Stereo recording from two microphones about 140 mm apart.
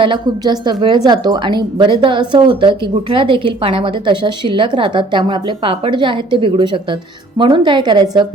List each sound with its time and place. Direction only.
0.0 s a woman's voice: 30° right (ahead or behind)